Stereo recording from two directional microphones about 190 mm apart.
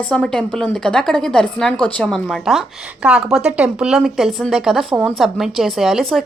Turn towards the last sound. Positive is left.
turn(degrees=0)  # may be behind; listen again after turning